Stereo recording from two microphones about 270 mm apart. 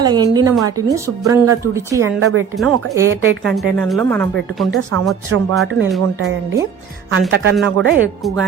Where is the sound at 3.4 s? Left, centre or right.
Centre.